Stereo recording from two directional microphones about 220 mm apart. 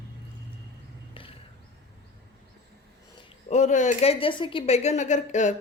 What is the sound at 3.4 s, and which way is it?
A woman's voice, 30° left (ahead or behind).